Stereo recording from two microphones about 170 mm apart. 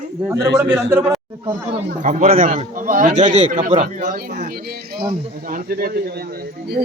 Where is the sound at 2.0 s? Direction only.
45° right (ahead or behind).